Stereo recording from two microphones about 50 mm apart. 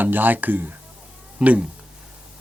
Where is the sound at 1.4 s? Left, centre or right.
Right.